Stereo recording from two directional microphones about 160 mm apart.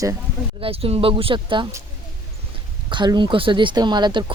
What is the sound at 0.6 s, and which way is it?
Speech, 35° right (ahead or behind).